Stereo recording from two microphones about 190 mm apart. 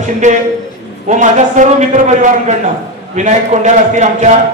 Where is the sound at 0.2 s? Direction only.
40° right (ahead or behind).